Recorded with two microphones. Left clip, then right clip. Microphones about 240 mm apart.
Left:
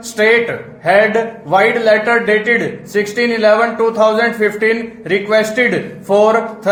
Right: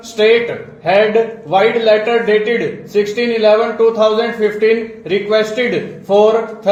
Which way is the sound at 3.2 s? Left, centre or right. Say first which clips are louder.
Left 1 dB; left.